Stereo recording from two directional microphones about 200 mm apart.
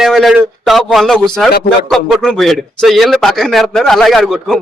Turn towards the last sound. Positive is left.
turn(degrees=0)  # may be behind; listen again after turning